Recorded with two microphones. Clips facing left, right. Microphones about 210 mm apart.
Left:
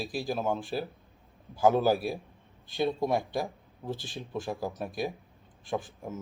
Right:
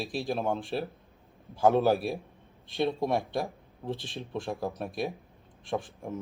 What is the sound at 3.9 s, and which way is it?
Speech, 25° right (ahead or behind).